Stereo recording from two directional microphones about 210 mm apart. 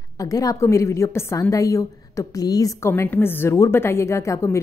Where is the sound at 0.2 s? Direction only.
15° left (ahead or behind).